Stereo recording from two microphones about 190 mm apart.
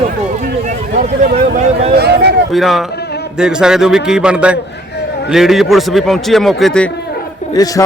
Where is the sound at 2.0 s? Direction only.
60° right (ahead or behind).